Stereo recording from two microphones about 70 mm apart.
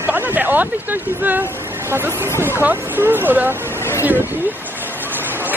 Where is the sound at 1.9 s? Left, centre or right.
Right.